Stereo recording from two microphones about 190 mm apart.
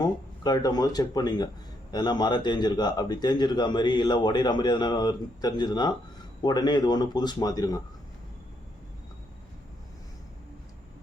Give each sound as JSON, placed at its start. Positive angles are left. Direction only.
{"t": 0.0, "sound": "a man's voice", "side_deg": 20}